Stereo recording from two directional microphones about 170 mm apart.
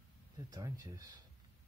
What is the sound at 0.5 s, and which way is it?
Speech, 20° right (ahead or behind).